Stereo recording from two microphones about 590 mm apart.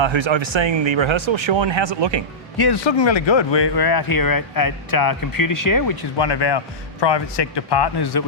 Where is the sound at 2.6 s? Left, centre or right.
Left.